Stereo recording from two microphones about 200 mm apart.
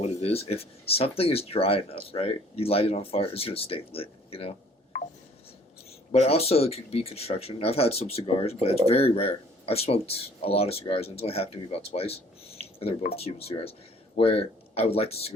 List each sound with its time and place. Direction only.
0.2 s speech: 30° left (ahead or behind)
6.1 s speech: 30° left (ahead or behind)